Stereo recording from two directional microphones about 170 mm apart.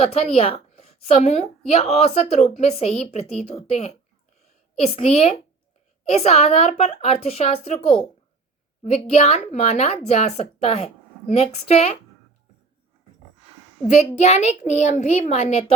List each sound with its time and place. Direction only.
0.0 s a woman's voice: 35° left (ahead or behind)
13.8 s a child's voice: 45° left (ahead or behind)